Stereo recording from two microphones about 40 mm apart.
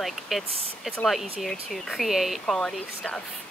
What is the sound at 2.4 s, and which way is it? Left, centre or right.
Speech, centre.